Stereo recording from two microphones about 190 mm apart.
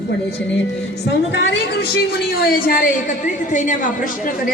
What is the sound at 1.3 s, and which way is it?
A woman's voice, 65° left (ahead or behind).